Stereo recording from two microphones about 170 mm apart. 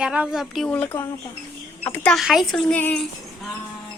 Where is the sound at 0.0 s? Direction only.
5° right (ahead or behind).